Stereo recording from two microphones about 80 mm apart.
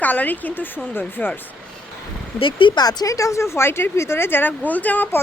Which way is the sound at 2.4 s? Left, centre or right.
Left.